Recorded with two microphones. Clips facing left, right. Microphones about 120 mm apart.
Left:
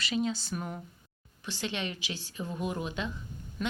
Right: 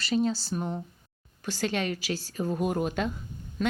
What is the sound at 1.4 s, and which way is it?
Speech, 40° right (ahead or behind).